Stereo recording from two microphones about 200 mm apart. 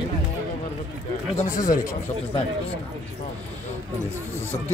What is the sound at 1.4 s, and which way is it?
Speech, 40° left (ahead or behind).